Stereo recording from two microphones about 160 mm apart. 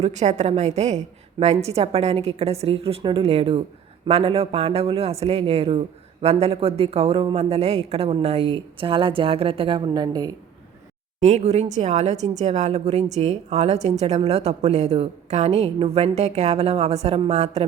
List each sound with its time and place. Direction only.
0.0 s speech: 45° right (ahead or behind); by 10.3 s 25° right (ahead or behind)
11.2 s a woman's voice: 45° right (ahead or behind)